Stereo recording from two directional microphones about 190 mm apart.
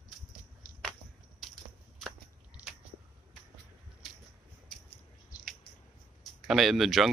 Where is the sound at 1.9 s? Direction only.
5° right (ahead or behind).